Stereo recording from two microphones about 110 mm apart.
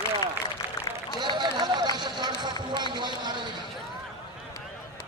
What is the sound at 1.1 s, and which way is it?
A man's voice, 45° right (ahead or behind).